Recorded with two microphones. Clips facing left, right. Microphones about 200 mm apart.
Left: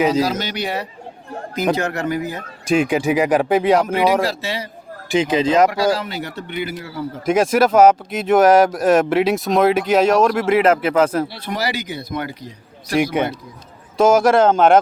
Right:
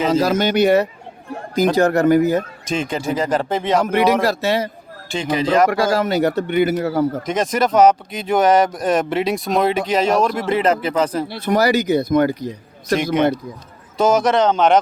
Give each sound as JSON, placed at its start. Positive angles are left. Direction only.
{"t": 0.2, "sound": "speech", "side_deg": -50}
{"t": 2.7, "sound": "speech", "side_deg": 10}
{"t": 4.2, "sound": "speech", "side_deg": -50}
{"t": 5.1, "sound": "speech", "side_deg": 20}
{"t": 5.7, "sound": "speech", "side_deg": -50}
{"t": 7.3, "sound": "speech", "side_deg": 5}
{"t": 11.3, "sound": "speech", "side_deg": -45}
{"t": 14.0, "sound": "speech", "side_deg": 5}